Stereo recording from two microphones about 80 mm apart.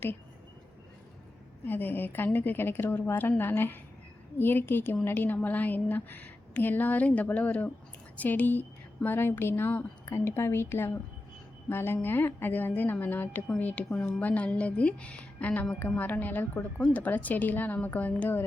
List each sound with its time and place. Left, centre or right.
1.6 s a woman's voice: left